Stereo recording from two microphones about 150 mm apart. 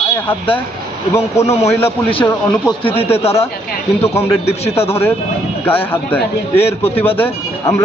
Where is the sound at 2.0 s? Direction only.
30° left (ahead or behind).